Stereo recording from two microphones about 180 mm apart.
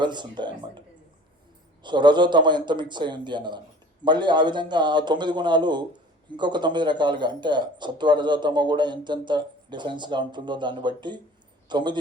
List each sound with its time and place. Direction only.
0.0 s speech: 25° right (ahead or behind)
1.8 s speech: 25° right (ahead or behind)